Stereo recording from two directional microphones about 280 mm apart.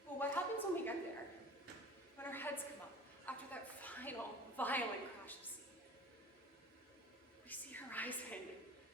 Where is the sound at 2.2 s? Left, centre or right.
Centre.